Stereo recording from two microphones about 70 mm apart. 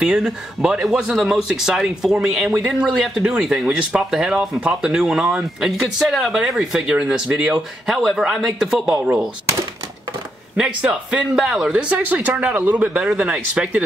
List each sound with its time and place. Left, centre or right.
0.2 s speech: centre
10.6 s speech: centre
11.9 s speech: right